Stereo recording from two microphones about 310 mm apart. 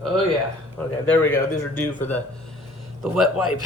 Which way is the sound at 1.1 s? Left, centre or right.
Centre.